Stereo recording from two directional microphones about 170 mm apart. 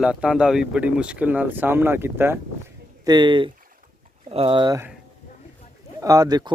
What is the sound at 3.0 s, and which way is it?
Speech, 25° right (ahead or behind).